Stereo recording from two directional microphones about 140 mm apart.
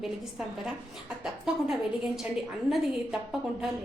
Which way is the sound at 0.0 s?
5° right (ahead or behind).